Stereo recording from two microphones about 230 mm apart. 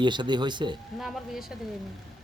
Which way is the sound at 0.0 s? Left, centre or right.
Centre.